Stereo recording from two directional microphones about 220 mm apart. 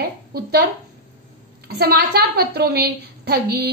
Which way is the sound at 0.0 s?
45° right (ahead or behind).